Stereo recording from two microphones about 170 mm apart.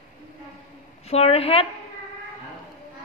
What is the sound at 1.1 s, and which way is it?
Speech, 35° left (ahead or behind).